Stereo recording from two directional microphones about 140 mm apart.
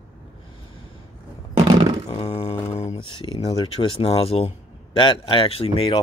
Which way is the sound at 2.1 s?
50° left (ahead or behind).